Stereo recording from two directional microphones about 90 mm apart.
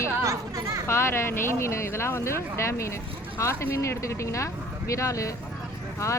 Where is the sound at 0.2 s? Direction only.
35° right (ahead or behind).